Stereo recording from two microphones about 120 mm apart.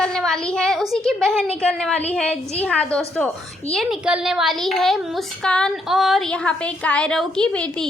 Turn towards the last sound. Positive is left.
turn(degrees=10)  # may be behind; listen again after turning